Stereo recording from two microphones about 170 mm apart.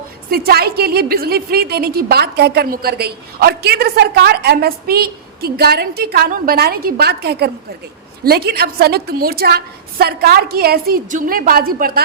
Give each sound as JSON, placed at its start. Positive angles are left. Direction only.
{"t": 0.3, "sound": "a woman's voice", "side_deg": -65}